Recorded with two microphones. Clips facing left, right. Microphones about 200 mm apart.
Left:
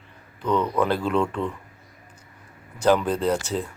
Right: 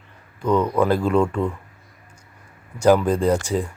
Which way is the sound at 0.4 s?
10° right (ahead or behind).